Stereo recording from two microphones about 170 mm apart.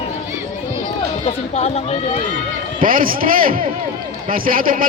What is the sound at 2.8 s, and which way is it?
Speech, 55° right (ahead or behind).